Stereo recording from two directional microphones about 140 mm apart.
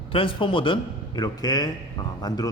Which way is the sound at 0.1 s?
40° left (ahead or behind).